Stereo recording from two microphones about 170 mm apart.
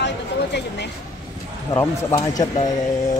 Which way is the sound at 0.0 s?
85° left.